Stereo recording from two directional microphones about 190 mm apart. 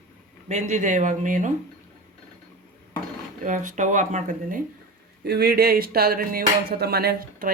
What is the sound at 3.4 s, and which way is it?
Speech, 40° right (ahead or behind).